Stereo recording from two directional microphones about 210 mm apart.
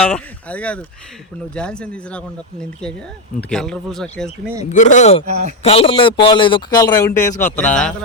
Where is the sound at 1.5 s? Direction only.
5° left (ahead or behind).